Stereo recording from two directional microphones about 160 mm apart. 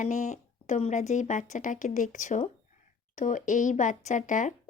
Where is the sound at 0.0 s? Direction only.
50° left (ahead or behind).